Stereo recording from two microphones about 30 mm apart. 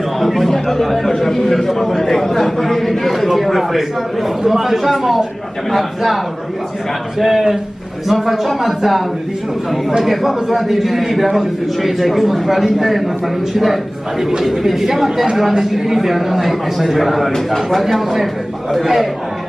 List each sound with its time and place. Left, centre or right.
0.2 s a man's voice: centre
2.0 s a sound: centre
4.4 s a man's voice: centre
7.2 s a man's voice: centre
10.0 s a man's voice: centre